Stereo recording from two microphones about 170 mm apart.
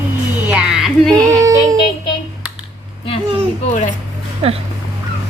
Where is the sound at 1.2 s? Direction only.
20° right (ahead or behind).